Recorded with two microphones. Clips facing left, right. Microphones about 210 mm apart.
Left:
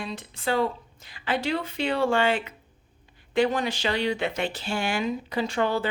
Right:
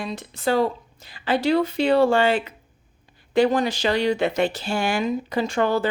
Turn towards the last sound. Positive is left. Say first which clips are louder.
# right 4 dB
turn(degrees=-45)  # may be behind; listen again after turning